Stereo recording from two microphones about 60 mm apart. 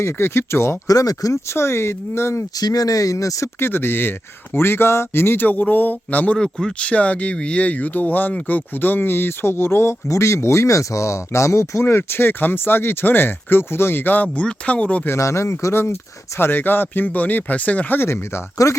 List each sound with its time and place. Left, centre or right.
0.0 s speech: left
0.9 s speech: left
1.5 s speech: left
2.6 s speech: left
3.6 s speech: left
6.3 s speech: centre; by 11.8 s left
11.8 s speech: left
15.2 s speech: left
18.5 s speech: left